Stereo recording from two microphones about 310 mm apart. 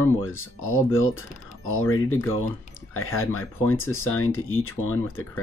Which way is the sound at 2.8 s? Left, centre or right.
Left.